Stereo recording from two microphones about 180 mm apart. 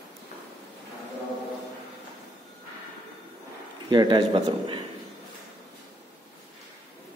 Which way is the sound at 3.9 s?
25° right (ahead or behind).